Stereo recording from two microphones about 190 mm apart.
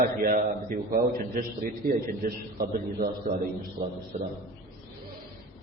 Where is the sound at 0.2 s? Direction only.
45° right (ahead or behind).